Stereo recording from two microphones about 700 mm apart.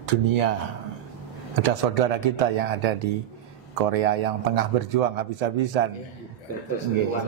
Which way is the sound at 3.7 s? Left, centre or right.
Right.